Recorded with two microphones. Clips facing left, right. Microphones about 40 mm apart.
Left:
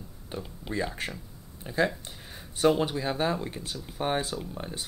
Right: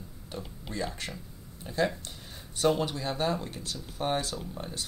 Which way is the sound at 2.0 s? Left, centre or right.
Centre.